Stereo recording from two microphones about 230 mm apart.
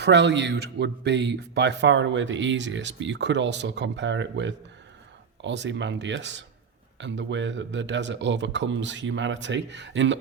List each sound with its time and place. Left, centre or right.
0.0 s speech: right